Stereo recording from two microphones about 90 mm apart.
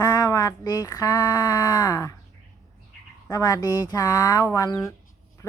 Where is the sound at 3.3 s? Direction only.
40° left (ahead or behind).